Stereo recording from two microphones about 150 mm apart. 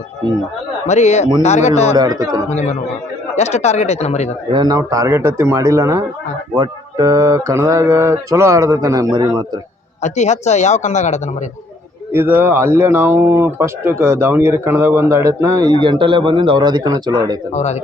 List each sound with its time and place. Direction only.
0.9 s speech: 50° left (ahead or behind)
2.0 s mantra: 25° right (ahead or behind)
2.5 s speech: 45° left (ahead or behind)
4.5 s mantra: 25° right (ahead or behind)
10.0 s speech: 50° left (ahead or behind)
12.1 s speech: 15° right (ahead or behind)
17.5 s speech: 45° left (ahead or behind)